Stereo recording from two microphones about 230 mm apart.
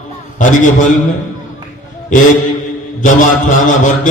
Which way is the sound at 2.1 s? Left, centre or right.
Left.